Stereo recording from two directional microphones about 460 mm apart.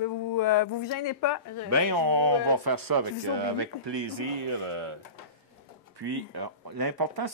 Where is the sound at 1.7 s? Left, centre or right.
Right.